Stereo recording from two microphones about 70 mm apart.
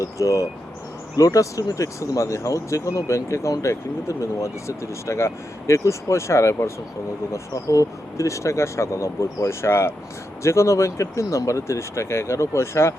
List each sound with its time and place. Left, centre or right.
0.2 s speech: left